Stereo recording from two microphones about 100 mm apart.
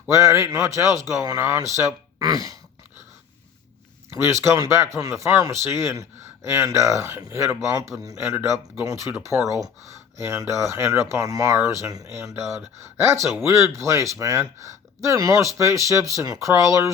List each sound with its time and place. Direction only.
0.1 s speech: 30° right (ahead or behind)
4.3 s speech: 30° right (ahead or behind)